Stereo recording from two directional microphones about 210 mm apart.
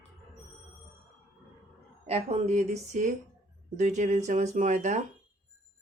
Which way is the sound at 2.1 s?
30° right (ahead or behind).